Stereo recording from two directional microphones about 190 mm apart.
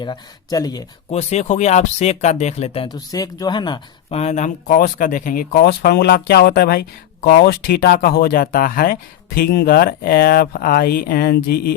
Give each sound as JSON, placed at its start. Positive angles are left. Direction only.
{"t": 0.0, "sound": "speech", "side_deg": 20}
{"t": 1.1, "sound": "speech", "side_deg": 35}
{"t": 4.2, "sound": "speech", "side_deg": 35}